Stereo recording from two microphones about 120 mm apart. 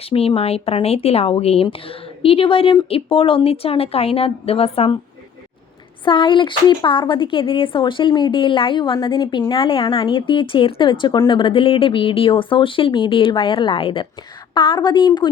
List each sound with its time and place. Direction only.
0.0 s speech: 50° left (ahead or behind)
6.1 s a woman's voice: 45° left (ahead or behind)